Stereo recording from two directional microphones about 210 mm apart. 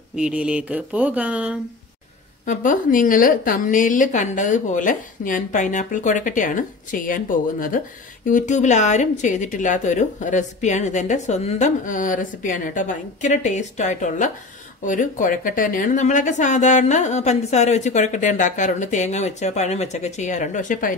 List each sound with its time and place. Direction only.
0.1 s speech: 5° right (ahead or behind)
2.4 s a woman's voice: 40° left (ahead or behind)